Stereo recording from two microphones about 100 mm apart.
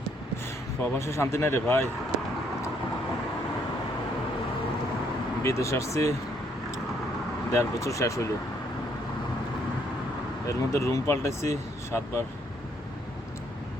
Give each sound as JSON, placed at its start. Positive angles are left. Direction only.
{"t": 0.9, "sound": "speech", "side_deg": 30}
{"t": 5.4, "sound": "speech", "side_deg": 30}
{"t": 7.5, "sound": "speech", "side_deg": 30}
{"t": 10.4, "sound": "speech", "side_deg": 30}